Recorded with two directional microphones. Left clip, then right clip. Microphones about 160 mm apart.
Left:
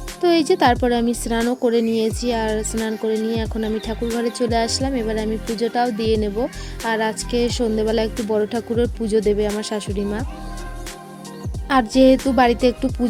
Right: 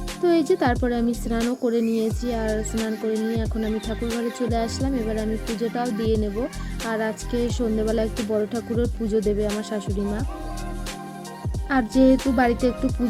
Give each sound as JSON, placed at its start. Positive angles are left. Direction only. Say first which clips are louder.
{"t": 0.2, "sound": "a woman's voice", "louder": "left 4 dB", "side_deg": 15}
{"t": 11.7, "sound": "a woman's voice", "louder": "left 5 dB", "side_deg": 15}